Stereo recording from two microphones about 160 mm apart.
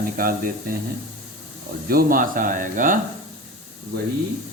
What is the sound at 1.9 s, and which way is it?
Speech, 65° right (ahead or behind).